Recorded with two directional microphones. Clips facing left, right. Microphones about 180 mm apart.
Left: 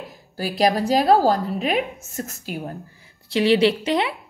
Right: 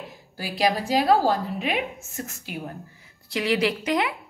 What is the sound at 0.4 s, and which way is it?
A woman's voice, 40° left (ahead or behind).